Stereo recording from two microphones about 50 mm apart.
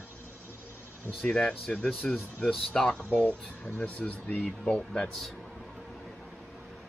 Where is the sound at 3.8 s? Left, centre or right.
Left.